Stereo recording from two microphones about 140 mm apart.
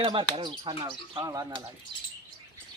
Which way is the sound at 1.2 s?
25° right (ahead or behind).